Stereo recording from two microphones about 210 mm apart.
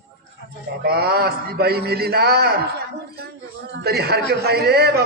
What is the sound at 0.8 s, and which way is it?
A man's voice, 50° right (ahead or behind).